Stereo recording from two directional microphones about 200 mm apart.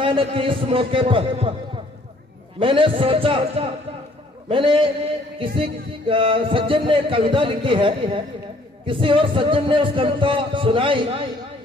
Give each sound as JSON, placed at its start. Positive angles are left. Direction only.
{"t": 0.0, "sound": "speech", "side_deg": -25}
{"t": 2.6, "sound": "speech", "side_deg": -25}